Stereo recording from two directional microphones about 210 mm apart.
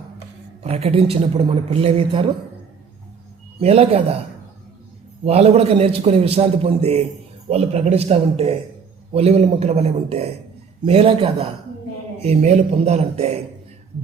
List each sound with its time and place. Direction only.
0.6 s a man's voice: 30° right (ahead or behind)
3.6 s a man's voice: 30° right (ahead or behind)
5.2 s a man's voice: 30° right (ahead or behind)